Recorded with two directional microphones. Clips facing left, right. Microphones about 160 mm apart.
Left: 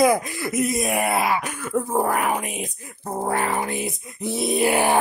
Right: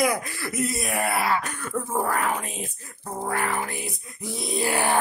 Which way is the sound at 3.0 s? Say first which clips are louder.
Left 5 dB; 40° left (ahead or behind).